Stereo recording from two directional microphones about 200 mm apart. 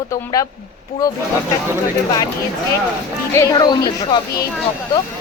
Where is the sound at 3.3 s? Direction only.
15° left (ahead or behind).